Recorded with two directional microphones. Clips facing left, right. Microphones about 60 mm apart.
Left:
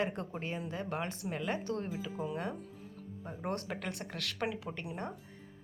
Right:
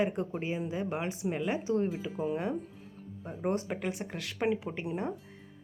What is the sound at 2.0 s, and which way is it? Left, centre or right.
Speech, right.